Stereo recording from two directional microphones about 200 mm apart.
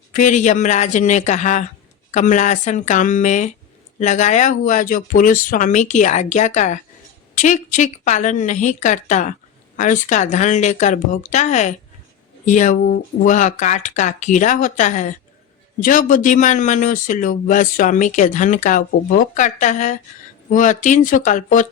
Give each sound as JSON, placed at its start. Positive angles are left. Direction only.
{"t": 0.1, "sound": "speech", "side_deg": 40}